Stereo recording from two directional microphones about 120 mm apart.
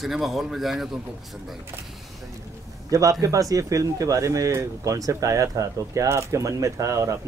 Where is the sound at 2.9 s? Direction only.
30° right (ahead or behind).